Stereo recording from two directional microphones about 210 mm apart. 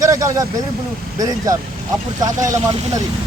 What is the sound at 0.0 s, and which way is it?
Vehicle, 15° right (ahead or behind).